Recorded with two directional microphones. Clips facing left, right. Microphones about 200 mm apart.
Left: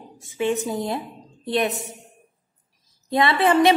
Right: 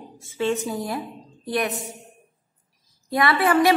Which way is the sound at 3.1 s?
25° left (ahead or behind).